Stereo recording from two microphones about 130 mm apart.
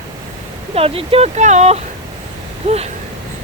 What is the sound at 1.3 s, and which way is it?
Speech, 65° right (ahead or behind).